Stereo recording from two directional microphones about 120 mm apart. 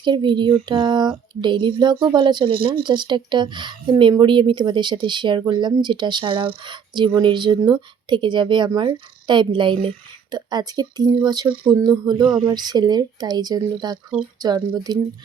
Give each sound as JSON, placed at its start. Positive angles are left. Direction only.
{"t": 0.0, "sound": "speech", "side_deg": -40}
{"t": 10.3, "sound": "speech", "side_deg": -35}